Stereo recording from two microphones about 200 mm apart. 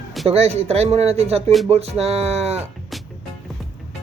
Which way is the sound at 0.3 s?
30° right (ahead or behind).